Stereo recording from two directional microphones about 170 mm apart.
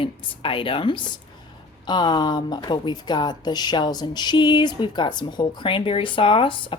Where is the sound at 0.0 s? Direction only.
30° left (ahead or behind).